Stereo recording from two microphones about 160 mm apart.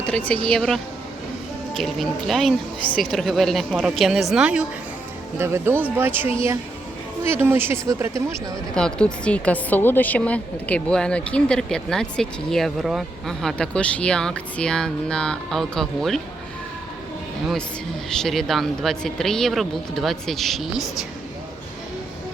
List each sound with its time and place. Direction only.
0.0 s a woman's voice: 10° left (ahead or behind)
5.4 s speech: 15° right (ahead or behind)
8.7 s a woman's voice: 5° left (ahead or behind)
18.2 s a woman's voice: centre (ahead or behind)